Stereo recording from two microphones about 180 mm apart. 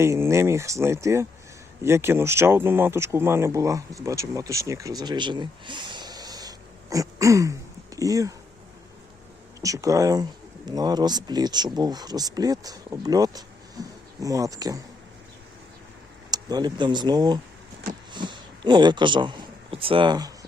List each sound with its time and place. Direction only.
0.0 s speech: 15° right (ahead or behind)
9.6 s speech: 20° right (ahead or behind)
16.3 s a man's voice: 20° right (ahead or behind)